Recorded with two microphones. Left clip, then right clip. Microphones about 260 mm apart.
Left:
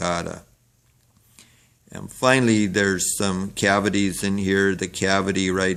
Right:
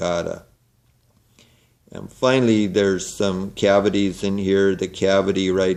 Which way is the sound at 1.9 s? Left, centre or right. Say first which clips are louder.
Even; left.